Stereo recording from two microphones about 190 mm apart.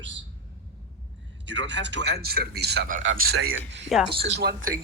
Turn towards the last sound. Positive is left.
turn(degrees=-60)  # may be behind; listen again after turning